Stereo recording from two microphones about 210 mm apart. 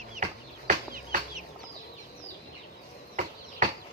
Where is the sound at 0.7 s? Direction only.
40° right (ahead or behind).